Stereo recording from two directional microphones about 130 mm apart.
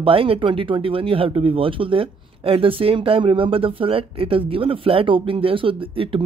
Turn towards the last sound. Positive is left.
turn(degrees=-40)  # may be behind; listen again after turning